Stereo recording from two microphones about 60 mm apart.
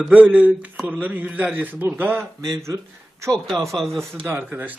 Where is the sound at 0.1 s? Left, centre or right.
Right.